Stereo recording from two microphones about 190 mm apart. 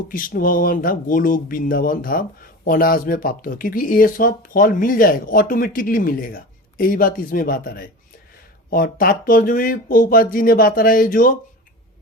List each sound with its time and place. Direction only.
0.1 s speech: 45° left (ahead or behind)